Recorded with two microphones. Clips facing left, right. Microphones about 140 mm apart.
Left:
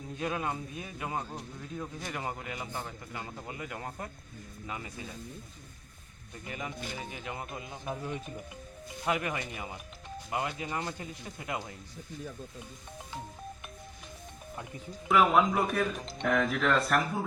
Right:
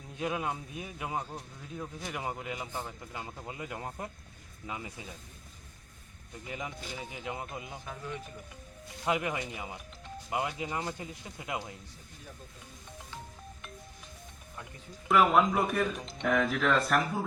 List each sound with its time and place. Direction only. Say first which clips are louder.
0.2 s a man's voice: even; 10° right (ahead or behind)
6.5 s a man's voice: left 1 dB; 15° right (ahead or behind)
7.9 s speech: left 7 dB; 20° left (ahead or behind)
9.0 s a man's voice: right 1 dB; 20° right (ahead or behind)
15.0 s speech: even; centre (ahead or behind)